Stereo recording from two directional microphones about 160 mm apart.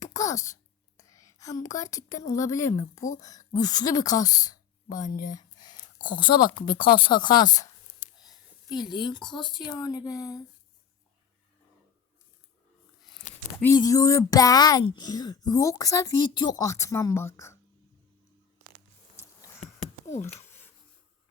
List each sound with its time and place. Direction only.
0.0 s wail: 20° left (ahead or behind)
2.5 s speech: 20° left (ahead or behind)
5.2 s a sound: 25° left (ahead or behind)
6.1 s speech: 30° left (ahead or behind)
8.7 s speech: 30° left (ahead or behind)
13.7 s speech: 20° left (ahead or behind)
19.5 s a sound: 45° left (ahead or behind)